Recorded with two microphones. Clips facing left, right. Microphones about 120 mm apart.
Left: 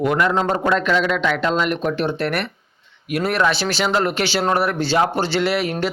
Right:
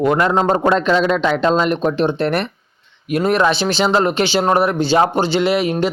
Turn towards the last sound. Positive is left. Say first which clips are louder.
# right 4 dB
turn(degrees=-20)  # may be behind; listen again after turning